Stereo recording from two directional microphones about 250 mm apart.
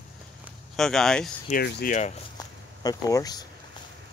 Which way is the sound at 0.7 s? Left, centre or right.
Centre.